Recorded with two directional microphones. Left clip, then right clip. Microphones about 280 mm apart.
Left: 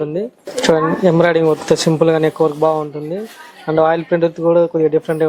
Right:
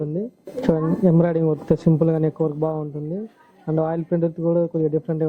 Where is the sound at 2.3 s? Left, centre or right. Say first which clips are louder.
Left 9 dB; left.